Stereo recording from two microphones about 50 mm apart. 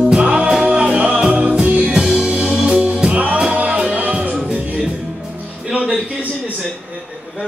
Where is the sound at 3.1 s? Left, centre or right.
Right.